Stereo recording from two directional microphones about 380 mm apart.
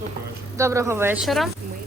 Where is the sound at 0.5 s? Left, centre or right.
Centre.